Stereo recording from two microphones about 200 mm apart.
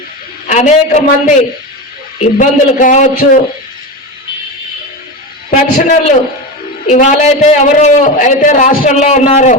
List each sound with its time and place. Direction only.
0.4 s a man's voice: 35° left (ahead or behind)
5.5 s a man's voice: 40° left (ahead or behind)
6.8 s a man's voice: 35° left (ahead or behind)